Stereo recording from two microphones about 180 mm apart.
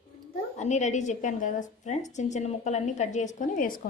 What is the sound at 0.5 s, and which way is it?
A woman's voice, 40° left (ahead or behind).